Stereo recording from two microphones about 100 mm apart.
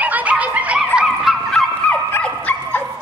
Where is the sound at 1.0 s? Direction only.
Centre (ahead or behind).